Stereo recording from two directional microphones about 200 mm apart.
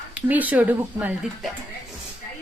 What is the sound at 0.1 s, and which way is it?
Speech, 10° right (ahead or behind).